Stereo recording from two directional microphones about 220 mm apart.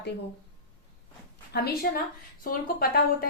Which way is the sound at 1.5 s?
45° left (ahead or behind).